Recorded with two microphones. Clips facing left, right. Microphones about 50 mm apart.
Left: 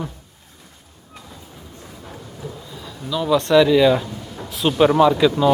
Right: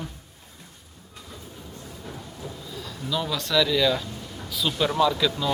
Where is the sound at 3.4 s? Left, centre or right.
Left.